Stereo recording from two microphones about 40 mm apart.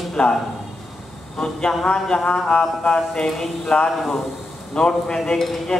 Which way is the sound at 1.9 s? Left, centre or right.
Left.